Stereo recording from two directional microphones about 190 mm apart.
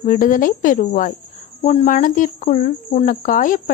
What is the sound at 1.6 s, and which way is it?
Speech, 35° left (ahead or behind).